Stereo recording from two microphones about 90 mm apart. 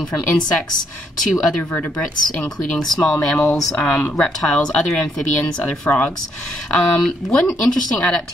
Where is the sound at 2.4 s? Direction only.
10° left (ahead or behind).